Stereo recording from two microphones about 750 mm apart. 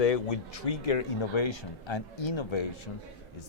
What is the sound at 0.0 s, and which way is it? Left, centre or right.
A man's voice, left.